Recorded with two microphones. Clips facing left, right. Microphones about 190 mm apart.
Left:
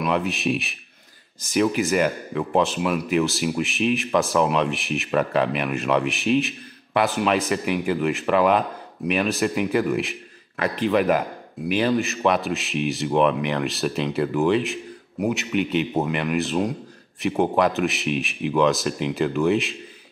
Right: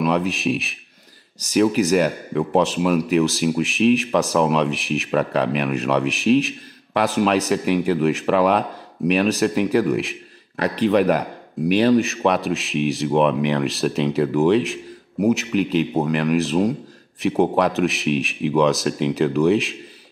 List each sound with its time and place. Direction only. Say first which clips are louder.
0.0 s speech: right 3 dB; centre (ahead or behind)
11.6 s speech: right 5 dB; 40° right (ahead or behind)
12.0 s speech: right 2 dB; centre (ahead or behind)